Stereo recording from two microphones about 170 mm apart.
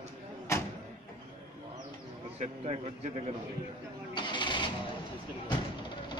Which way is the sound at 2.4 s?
40° right (ahead or behind).